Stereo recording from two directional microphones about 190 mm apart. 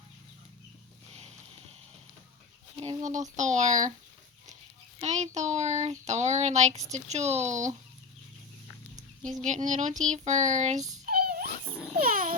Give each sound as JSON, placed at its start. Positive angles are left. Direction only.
{"t": 3.0, "sound": "a child's voice", "side_deg": -40}
{"t": 4.9, "sound": "a child's voice", "side_deg": -35}
{"t": 9.4, "sound": "a child's voice", "side_deg": -40}
{"t": 11.0, "sound": "a sound", "side_deg": -55}